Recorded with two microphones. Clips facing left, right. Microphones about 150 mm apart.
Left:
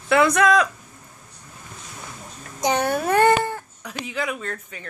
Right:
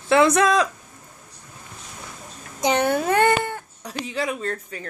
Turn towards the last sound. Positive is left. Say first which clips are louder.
# right 3 dB
turn(degrees=-35)  # may be behind; listen again after turning